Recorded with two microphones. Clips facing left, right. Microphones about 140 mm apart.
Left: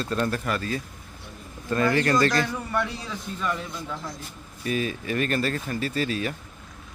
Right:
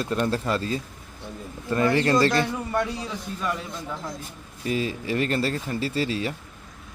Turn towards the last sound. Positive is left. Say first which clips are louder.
# right 1 dB
turn(degrees=-25)  # may be behind; listen again after turning